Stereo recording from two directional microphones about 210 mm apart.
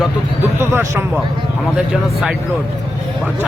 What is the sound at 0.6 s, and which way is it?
Speech, 10° right (ahead or behind).